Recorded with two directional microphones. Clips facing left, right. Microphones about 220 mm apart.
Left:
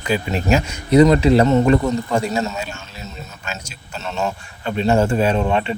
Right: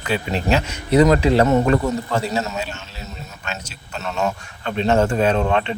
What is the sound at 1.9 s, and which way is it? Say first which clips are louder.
Speech: left 2 dB; 10° right (ahead or behind).